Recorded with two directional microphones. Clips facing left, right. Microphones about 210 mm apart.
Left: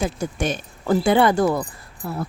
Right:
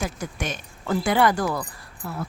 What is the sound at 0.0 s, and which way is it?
A woman's voice, 30° left (ahead or behind).